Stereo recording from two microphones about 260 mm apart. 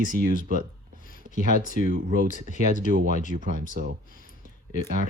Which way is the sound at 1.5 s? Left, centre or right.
Right.